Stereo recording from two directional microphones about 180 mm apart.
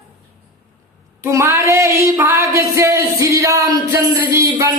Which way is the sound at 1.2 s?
15° right (ahead or behind).